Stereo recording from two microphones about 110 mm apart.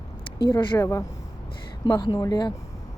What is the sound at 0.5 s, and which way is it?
Speech, 30° left (ahead or behind).